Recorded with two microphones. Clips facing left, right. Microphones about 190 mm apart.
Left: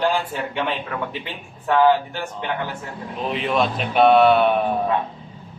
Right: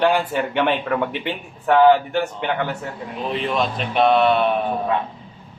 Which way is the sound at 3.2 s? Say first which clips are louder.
Left 1 dB; centre (ahead or behind).